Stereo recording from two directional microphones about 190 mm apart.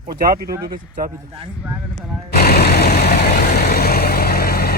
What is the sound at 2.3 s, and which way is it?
Vehicle, 55° left (ahead or behind).